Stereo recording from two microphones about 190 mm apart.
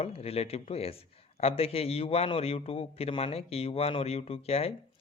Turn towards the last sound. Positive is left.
turn(degrees=30)  # may be behind; listen again after turning